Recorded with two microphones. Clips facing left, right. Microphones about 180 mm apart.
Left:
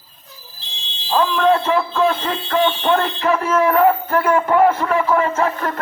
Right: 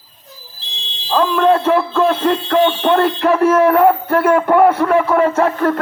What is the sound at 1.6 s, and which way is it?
Speech, 60° right (ahead or behind).